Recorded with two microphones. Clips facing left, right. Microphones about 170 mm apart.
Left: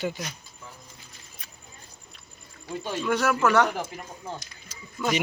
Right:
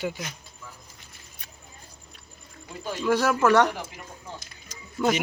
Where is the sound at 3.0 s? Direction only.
30° right (ahead or behind).